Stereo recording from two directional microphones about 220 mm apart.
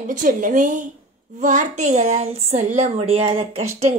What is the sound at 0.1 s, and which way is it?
Speech, 35° right (ahead or behind).